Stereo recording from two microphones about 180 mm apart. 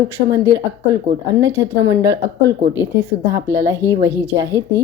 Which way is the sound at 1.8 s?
20° right (ahead or behind).